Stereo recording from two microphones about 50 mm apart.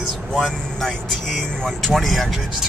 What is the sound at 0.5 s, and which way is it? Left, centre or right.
Speech, centre.